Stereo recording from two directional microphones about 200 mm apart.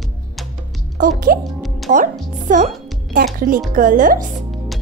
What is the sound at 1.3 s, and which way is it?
Speech, 45° right (ahead or behind).